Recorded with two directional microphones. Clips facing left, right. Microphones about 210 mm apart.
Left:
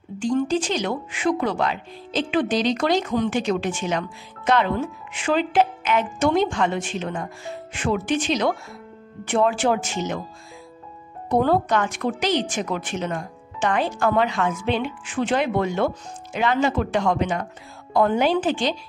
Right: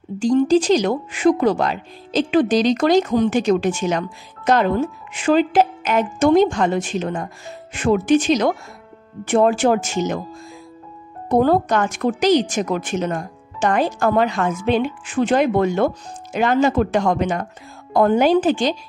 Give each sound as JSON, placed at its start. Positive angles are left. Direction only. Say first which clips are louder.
{"t": 0.2, "sound": "a woman's voice", "louder": "right 6 dB", "side_deg": -35}
{"t": 11.2, "sound": "speech", "louder": "right 4 dB", "side_deg": -45}